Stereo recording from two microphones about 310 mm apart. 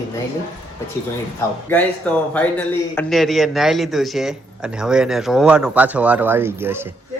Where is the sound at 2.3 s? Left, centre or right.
Centre.